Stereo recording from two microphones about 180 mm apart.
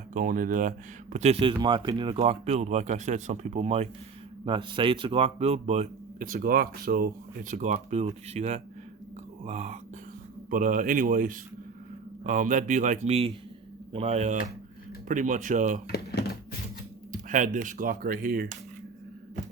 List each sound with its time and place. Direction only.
0.1 s speech: 50° right (ahead or behind)
1.1 s speech: 35° right (ahead or behind)
15.9 s a sound: 60° left (ahead or behind)
17.1 s speech: 45° right (ahead or behind)